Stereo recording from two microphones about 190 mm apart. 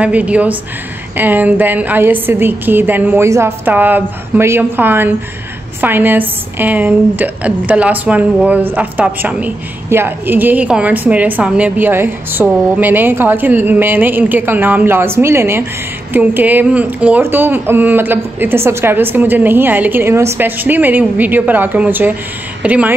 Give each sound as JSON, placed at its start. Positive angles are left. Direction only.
{"t": 0.0, "sound": "a woman's voice", "side_deg": -5}